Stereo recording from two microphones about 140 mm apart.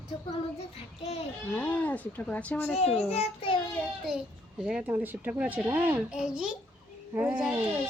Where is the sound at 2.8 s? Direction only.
45° left (ahead or behind).